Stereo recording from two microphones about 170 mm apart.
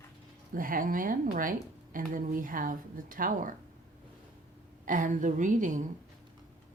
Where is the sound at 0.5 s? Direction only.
55° right (ahead or behind).